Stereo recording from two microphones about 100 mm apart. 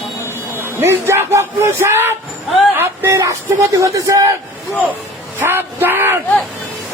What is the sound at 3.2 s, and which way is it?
A man's voice, 30° right (ahead or behind).